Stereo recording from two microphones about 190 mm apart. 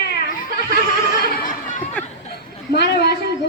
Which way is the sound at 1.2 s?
50° left (ahead or behind).